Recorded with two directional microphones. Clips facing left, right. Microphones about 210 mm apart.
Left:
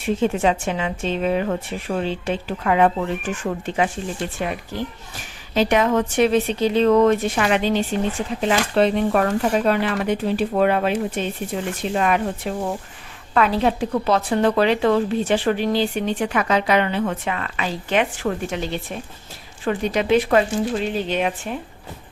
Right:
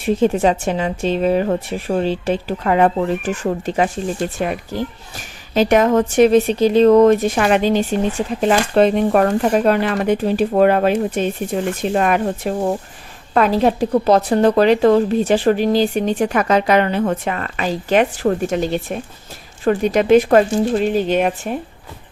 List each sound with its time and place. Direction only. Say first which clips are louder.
0.0 s a woman's voice: right 4 dB; 40° right (ahead or behind)